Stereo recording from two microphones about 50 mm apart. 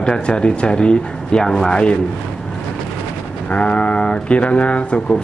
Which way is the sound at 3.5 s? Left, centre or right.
Left.